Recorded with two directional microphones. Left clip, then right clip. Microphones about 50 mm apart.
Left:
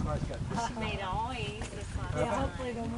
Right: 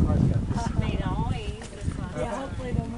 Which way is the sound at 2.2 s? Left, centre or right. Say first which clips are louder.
Even; left.